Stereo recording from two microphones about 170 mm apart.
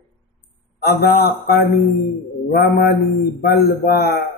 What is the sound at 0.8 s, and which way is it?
A man's voice, 65° left (ahead or behind).